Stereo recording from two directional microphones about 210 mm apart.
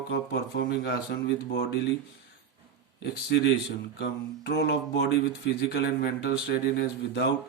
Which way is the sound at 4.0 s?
50° left (ahead or behind).